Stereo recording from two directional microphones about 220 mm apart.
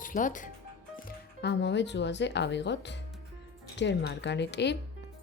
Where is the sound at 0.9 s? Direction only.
50° left (ahead or behind).